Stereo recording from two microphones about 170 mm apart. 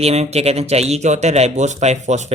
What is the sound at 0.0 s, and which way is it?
Speech, 40° right (ahead or behind).